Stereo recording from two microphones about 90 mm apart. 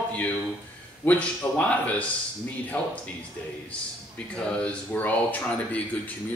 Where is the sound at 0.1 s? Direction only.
15° left (ahead or behind).